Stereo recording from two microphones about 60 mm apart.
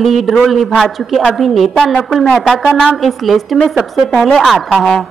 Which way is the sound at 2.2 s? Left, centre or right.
Centre.